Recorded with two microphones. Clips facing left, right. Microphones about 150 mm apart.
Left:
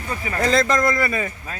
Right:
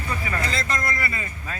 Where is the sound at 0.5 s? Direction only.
90° left.